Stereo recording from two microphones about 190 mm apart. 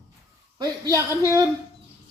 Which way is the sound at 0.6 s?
20° right (ahead or behind).